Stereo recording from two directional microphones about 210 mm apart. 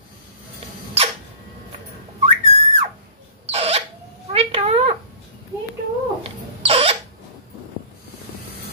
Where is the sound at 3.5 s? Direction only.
30° right (ahead or behind).